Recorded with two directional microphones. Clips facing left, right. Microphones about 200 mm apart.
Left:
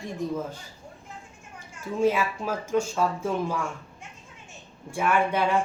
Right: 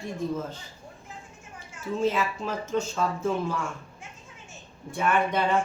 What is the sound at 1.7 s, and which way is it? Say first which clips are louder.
Speech: left 2 dB; 10° left (ahead or behind).